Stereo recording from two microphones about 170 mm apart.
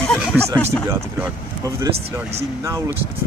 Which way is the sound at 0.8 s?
15° right (ahead or behind).